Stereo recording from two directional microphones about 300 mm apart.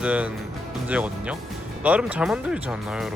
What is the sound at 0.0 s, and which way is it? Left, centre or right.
Speech, centre.